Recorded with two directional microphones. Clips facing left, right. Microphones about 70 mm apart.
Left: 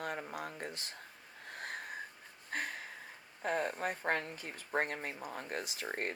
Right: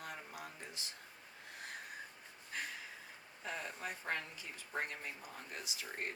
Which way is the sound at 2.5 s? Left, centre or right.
Left.